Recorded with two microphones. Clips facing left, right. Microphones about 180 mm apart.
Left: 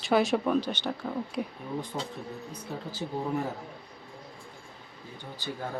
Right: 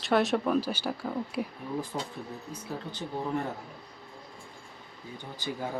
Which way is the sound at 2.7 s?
5° left (ahead or behind).